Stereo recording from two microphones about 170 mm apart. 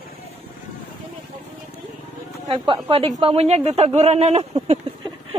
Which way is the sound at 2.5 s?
30° right (ahead or behind).